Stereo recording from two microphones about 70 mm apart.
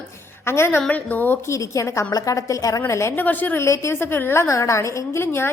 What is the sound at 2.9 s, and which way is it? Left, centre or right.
Speech, left.